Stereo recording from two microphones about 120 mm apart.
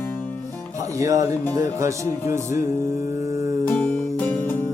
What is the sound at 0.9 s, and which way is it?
Music, 25° right (ahead or behind).